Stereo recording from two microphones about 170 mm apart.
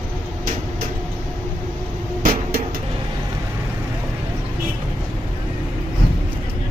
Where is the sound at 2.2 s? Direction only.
60° right (ahead or behind).